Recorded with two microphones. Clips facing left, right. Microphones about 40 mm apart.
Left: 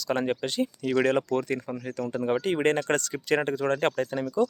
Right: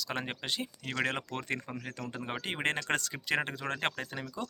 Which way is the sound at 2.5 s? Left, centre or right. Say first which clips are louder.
Left 7 dB; centre.